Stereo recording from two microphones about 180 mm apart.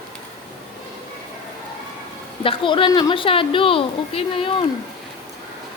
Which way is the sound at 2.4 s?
30° left (ahead or behind).